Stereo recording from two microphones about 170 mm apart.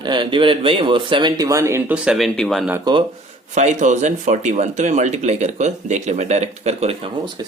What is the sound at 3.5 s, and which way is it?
Speech, 45° right (ahead or behind).